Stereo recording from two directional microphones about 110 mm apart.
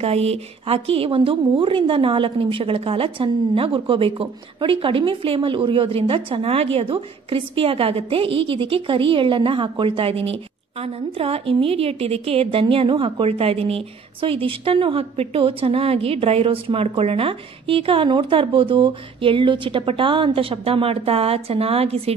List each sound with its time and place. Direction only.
0.0 s a woman's voice: 65° right (ahead or behind)